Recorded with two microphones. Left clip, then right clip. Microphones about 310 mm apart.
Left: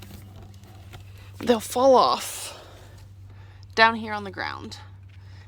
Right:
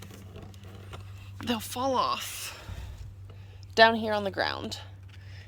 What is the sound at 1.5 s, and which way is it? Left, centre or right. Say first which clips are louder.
Speech: left 12 dB; centre.